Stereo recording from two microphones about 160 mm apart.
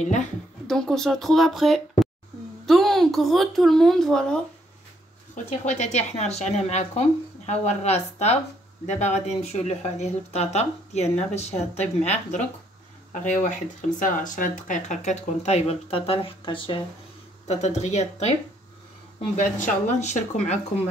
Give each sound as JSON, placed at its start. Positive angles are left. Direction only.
{"t": 0.0, "sound": "a woman's voice", "side_deg": 50}
{"t": 0.7, "sound": "speech", "side_deg": 0}
{"t": 5.3, "sound": "speech", "side_deg": 45}
{"t": 17.5, "sound": "speech", "side_deg": 45}
{"t": 19.3, "sound": "speech", "side_deg": 50}